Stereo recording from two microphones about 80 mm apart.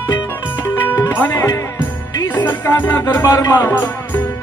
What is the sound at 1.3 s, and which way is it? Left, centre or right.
Music, left.